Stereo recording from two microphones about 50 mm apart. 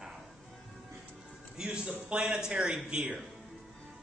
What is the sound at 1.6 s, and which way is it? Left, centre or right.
A man's voice, right.